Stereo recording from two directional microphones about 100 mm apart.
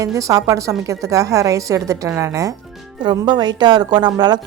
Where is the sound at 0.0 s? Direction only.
35° right (ahead or behind).